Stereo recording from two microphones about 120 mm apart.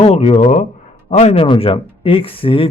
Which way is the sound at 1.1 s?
65° left (ahead or behind).